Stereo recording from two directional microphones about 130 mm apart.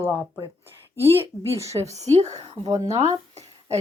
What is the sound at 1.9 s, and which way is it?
Speech, 60° right (ahead or behind).